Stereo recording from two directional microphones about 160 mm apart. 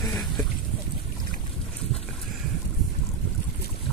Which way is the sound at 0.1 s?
Centre (ahead or behind).